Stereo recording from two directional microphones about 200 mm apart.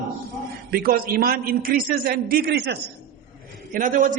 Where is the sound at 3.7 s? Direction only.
40° right (ahead or behind).